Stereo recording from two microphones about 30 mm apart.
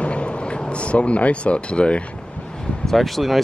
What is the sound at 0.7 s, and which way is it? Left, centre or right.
Speech, left.